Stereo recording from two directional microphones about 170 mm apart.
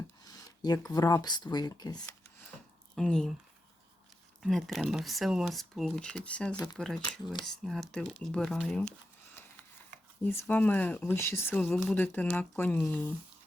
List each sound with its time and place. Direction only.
0.3 s speech: 20° left (ahead or behind)
2.9 s speech: 5° left (ahead or behind)
4.4 s speech: centre (ahead or behind)
10.2 s speech: 15° left (ahead or behind)